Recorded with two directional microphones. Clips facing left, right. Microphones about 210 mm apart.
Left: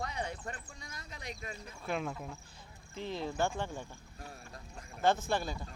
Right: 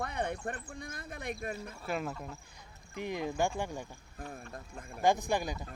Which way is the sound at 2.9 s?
15° right (ahead or behind).